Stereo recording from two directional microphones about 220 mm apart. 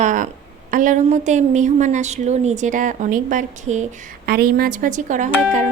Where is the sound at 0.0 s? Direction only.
35° right (ahead or behind).